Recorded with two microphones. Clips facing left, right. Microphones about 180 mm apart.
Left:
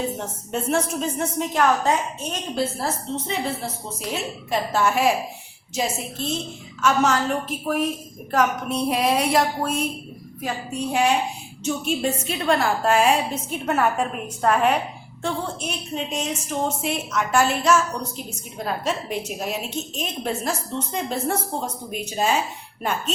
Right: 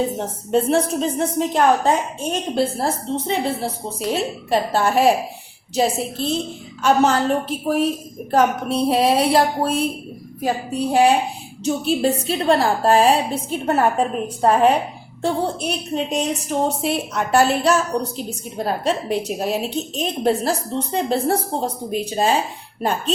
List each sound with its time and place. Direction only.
0.2 s a woman's voice: 35° right (ahead or behind)